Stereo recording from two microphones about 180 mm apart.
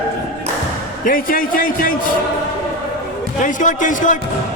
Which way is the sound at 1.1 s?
50° left (ahead or behind).